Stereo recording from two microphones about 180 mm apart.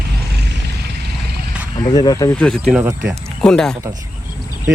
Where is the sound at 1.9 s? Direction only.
20° left (ahead or behind).